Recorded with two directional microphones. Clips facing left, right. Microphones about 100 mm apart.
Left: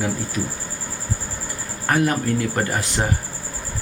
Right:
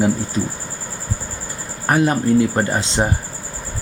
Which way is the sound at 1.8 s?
20° right (ahead or behind).